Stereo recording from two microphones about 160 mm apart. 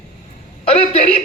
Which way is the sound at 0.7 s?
40° left (ahead or behind).